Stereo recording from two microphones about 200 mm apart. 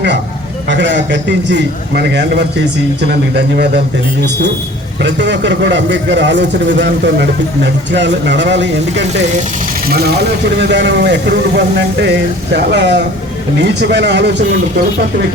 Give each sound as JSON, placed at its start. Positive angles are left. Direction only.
{"t": 0.7, "sound": "a man's voice", "side_deg": -65}
{"t": 5.0, "sound": "a man's voice", "side_deg": -60}
{"t": 10.6, "sound": "a man's voice", "side_deg": -60}